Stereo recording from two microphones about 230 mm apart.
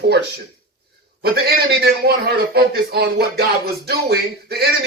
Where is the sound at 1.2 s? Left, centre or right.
Right.